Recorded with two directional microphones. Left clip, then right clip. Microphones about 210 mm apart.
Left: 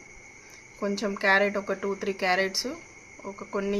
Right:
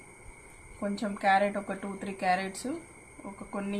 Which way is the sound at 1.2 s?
60° left (ahead or behind).